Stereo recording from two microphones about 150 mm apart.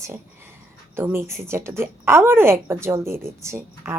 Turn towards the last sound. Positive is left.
turn(degrees=-20)  # may be behind; listen again after turning